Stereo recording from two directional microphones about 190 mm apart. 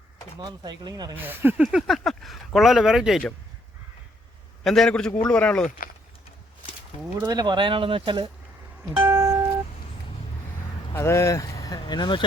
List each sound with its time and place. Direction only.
0.3 s speech: 25° right (ahead or behind)
1.1 s speech: 10° right (ahead or behind)
4.6 s speech: centre (ahead or behind)
7.2 s speech: 20° right (ahead or behind)
8.9 s music: 10° right (ahead or behind)
10.9 s speech: 15° left (ahead or behind)